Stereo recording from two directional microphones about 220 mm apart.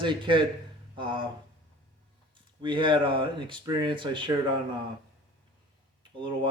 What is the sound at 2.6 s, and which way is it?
Speech, 20° right (ahead or behind).